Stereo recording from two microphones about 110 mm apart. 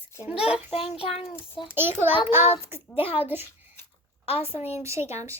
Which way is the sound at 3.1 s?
15° right (ahead or behind).